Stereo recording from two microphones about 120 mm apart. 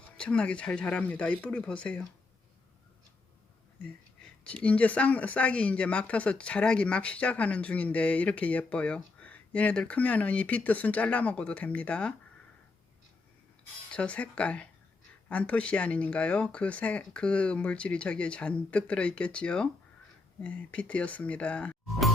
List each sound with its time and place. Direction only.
0.2 s speech: 10° left (ahead or behind)
4.6 s speech: 10° left (ahead or behind)
13.9 s speech: 10° left (ahead or behind)